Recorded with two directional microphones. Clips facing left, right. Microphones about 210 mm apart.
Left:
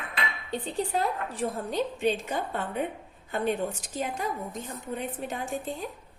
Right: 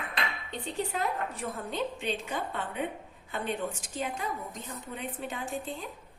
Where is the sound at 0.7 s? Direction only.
35° left (ahead or behind).